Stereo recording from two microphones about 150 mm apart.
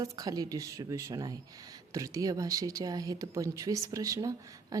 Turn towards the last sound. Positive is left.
turn(degrees=-20)  # may be behind; listen again after turning